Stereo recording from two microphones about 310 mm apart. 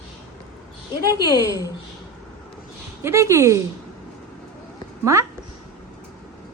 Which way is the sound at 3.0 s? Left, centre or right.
Centre.